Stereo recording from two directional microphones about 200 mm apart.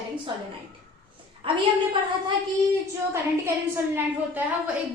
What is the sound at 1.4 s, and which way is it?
Speech, 25° right (ahead or behind).